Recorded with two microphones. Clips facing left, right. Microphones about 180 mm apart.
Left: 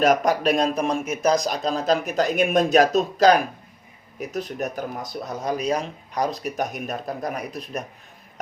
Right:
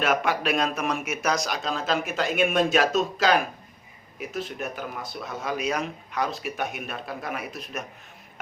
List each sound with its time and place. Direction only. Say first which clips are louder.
0.0 s speech: left 6 dB; 40° left (ahead or behind)